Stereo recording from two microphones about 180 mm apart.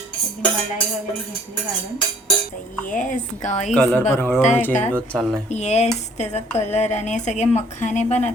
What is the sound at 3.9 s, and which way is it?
A man's voice, 10° left (ahead or behind).